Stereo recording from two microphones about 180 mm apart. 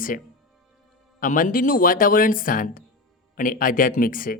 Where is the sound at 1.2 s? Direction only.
45° left (ahead or behind).